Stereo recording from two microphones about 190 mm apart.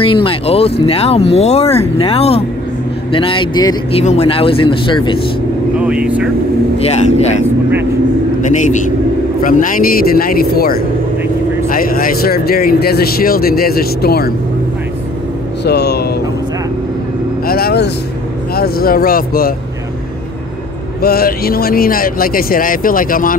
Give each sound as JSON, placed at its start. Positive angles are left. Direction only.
{"t": 0.0, "sound": "speech", "side_deg": 30}
{"t": 5.8, "sound": "speech", "side_deg": -5}
{"t": 6.8, "sound": "speech", "side_deg": 35}
{"t": 9.4, "sound": "speech", "side_deg": 45}
{"t": 15.6, "sound": "vehicle", "side_deg": 60}
{"t": 17.5, "sound": "vehicle", "side_deg": 55}
{"t": 18.5, "sound": "speech", "side_deg": 55}
{"t": 21.0, "sound": "speech", "side_deg": 50}